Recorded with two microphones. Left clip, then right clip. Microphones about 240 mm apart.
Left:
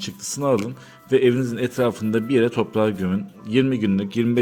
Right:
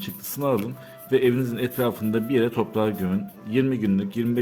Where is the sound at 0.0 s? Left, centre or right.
Centre.